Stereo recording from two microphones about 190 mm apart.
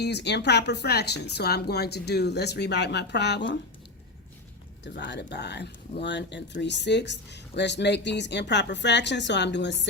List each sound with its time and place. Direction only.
0.0 s speech: 65° left (ahead or behind)
4.8 s speech: 65° left (ahead or behind)